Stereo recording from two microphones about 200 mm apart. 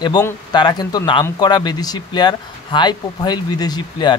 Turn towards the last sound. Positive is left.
turn(degrees=20)  # may be behind; listen again after turning